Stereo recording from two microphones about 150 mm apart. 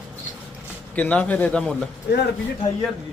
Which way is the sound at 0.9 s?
10° left (ahead or behind).